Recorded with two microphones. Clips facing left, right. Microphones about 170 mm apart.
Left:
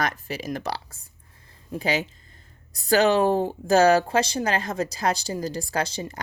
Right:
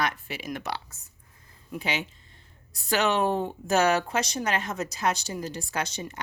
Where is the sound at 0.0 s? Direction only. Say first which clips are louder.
Left 2 dB; 40° left (ahead or behind).